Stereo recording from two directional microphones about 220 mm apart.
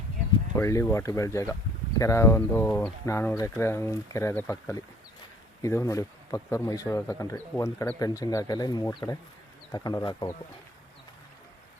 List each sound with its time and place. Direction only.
0.5 s speech: 15° left (ahead or behind)